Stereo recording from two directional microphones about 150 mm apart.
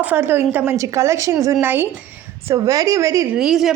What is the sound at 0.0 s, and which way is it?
A woman's voice, 15° right (ahead or behind).